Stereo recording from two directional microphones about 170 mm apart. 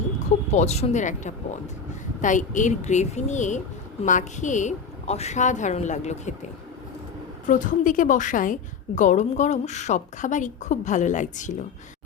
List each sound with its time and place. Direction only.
0.5 s a woman's voice: 40° left (ahead or behind)
7.4 s a woman's voice: 50° left (ahead or behind)